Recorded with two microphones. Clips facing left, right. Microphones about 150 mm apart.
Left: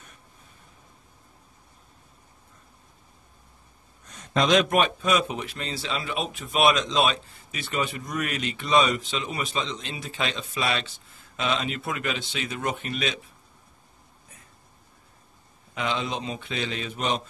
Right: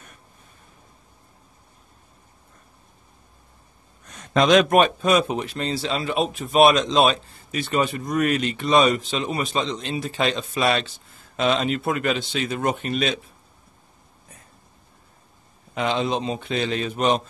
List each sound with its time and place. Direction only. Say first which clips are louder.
4.2 s a man's voice: right 5 dB; 70° right (ahead or behind); by 13.2 s 35° right (ahead or behind)
15.7 s a man's voice: right 6 dB; 35° right (ahead or behind)